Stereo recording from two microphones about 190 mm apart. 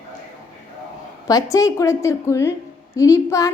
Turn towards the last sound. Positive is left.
turn(degrees=15)  # may be behind; listen again after turning